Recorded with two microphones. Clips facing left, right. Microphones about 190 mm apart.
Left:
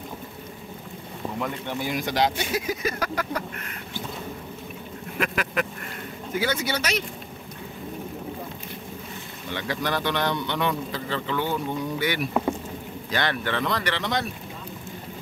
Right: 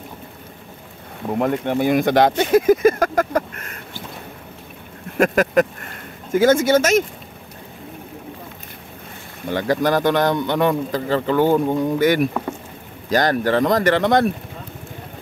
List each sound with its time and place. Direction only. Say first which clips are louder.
1.4 s speech: right 12 dB; 55° right (ahead or behind)
5.2 s speech: right 11 dB; 45° right (ahead or behind)
9.5 s speech: right 10 dB; 45° right (ahead or behind)